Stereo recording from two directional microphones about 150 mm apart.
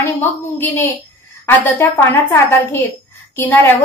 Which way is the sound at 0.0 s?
15° left (ahead or behind).